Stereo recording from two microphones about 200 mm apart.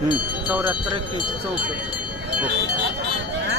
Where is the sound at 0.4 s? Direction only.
5° right (ahead or behind).